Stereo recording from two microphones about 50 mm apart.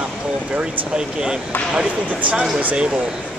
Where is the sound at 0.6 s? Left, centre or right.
Centre.